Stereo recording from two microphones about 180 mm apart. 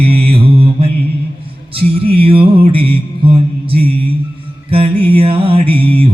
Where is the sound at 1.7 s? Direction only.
30° right (ahead or behind).